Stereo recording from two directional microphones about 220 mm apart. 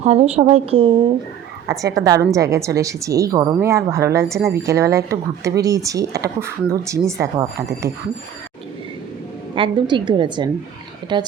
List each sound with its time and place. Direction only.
0.0 s speech: 30° right (ahead or behind); by 7.9 s 15° right (ahead or behind)
9.6 s speech: 20° right (ahead or behind)